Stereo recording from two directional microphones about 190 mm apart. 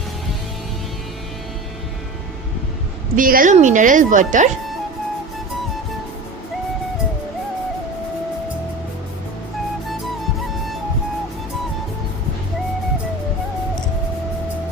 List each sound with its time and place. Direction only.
3.2 s speech: 45° right (ahead or behind)